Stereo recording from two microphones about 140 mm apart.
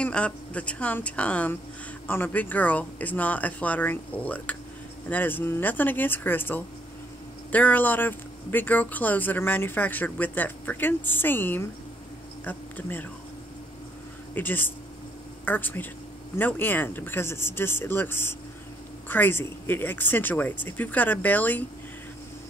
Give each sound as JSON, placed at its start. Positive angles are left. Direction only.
{"t": 0.0, "sound": "speech", "side_deg": 10}
{"t": 14.3, "sound": "speech", "side_deg": 15}